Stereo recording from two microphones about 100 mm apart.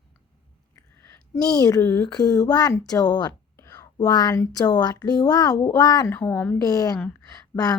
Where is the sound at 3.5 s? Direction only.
30° left (ahead or behind).